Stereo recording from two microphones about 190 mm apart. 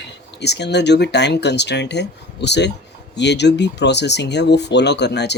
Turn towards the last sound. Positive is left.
turn(degrees=65)  # may be behind; listen again after turning